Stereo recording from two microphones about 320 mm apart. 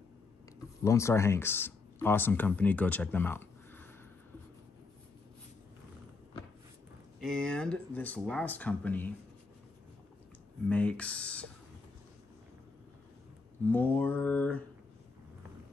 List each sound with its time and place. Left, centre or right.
0.8 s speech: centre
7.2 s speech: centre
10.7 s speech: centre
13.7 s speech: centre